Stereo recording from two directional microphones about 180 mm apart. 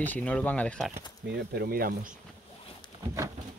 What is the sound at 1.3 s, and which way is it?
Speech, 60° right (ahead or behind).